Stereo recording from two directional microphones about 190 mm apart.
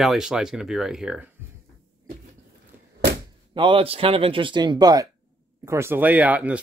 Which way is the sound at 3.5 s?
25° right (ahead or behind).